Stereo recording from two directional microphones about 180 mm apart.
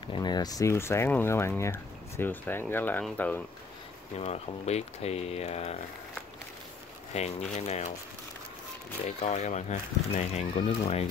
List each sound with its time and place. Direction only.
0.1 s speech: 25° left (ahead or behind)
4.2 s speech: 35° left (ahead or behind)
7.5 s speech: 40° left (ahead or behind)
9.0 s speech: 35° left (ahead or behind)